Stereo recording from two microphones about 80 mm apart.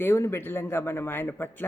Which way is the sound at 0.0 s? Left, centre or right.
Left.